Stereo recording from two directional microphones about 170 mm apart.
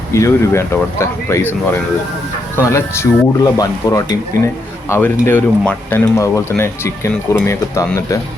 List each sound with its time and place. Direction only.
0.1 s speech: 15° left (ahead or behind)